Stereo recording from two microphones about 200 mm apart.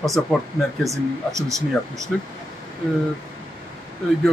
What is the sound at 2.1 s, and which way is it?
Speech, centre (ahead or behind).